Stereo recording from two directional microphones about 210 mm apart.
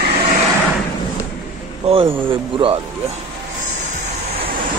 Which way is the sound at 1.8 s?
25° right (ahead or behind).